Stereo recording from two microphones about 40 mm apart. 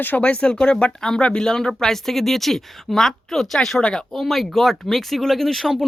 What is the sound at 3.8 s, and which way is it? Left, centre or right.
Speech, left.